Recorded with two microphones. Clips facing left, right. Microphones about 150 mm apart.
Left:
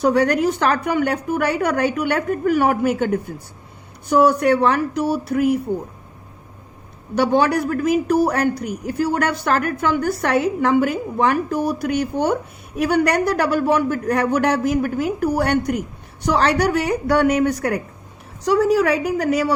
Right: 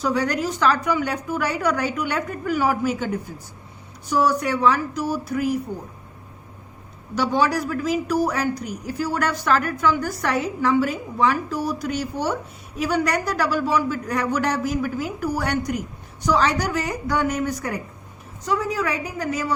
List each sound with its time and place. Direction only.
0.0 s a woman's voice: 60° left (ahead or behind)
7.2 s a woman's voice: 55° left (ahead or behind)